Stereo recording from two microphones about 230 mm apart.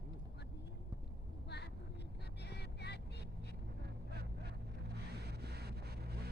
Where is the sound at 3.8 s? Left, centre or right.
Right.